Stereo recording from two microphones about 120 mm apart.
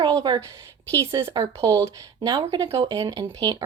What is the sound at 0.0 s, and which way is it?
Speech, 30° right (ahead or behind).